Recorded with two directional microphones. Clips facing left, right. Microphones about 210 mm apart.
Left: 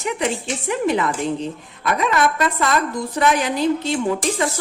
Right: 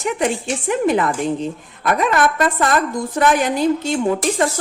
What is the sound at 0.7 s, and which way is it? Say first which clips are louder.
A woman's voice: right 3 dB; 50° right (ahead or behind).